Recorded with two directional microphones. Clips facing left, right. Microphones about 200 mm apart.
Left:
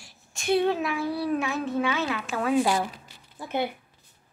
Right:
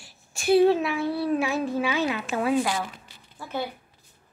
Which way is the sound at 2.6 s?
30° left (ahead or behind).